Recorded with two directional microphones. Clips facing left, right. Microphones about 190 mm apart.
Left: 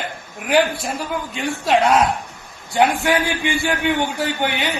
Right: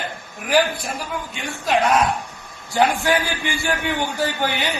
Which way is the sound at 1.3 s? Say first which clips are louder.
Left 3 dB; 30° left (ahead or behind).